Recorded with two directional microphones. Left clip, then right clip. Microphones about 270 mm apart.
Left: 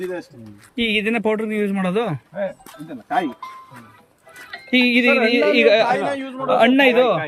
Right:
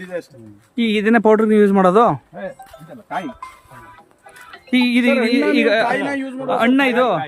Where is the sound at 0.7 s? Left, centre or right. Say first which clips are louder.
Right 3 dB; centre.